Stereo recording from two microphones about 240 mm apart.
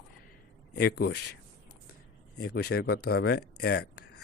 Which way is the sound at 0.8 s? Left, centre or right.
Left.